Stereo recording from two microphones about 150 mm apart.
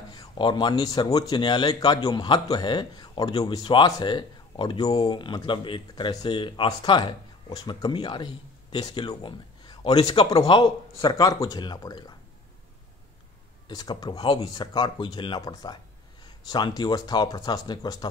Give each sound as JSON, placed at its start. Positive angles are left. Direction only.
{"t": 0.1, "sound": "speech", "side_deg": 30}
{"t": 13.7, "sound": "speech", "side_deg": 30}